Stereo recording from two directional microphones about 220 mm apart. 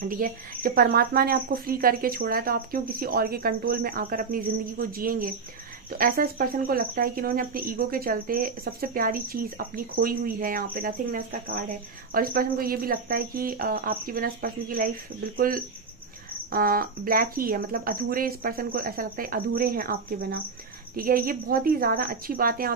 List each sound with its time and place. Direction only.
0.1 s speech: 40° right (ahead or behind)